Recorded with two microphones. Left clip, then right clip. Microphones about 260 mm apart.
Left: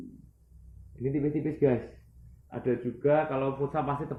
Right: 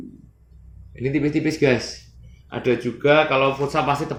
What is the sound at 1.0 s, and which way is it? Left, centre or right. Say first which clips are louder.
Speech: right 8 dB; right.